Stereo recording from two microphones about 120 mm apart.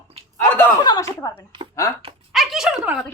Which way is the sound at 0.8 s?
30° left (ahead or behind).